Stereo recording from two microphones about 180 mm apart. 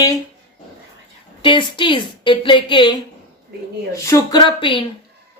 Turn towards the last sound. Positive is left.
turn(degrees=25)  # may be behind; listen again after turning